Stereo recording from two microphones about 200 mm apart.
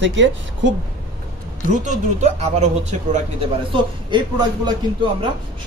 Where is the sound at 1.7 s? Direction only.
35° right (ahead or behind).